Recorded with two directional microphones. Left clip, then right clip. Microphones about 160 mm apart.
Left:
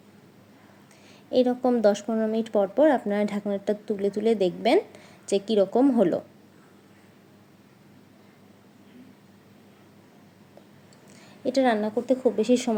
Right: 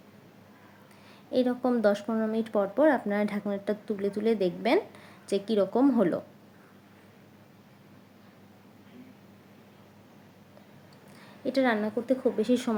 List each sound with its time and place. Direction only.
1.3 s speech: 10° left (ahead or behind)
11.4 s speech: 15° left (ahead or behind)